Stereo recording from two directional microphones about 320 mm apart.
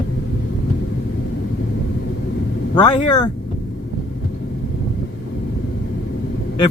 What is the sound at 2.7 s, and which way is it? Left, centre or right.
Speech, centre.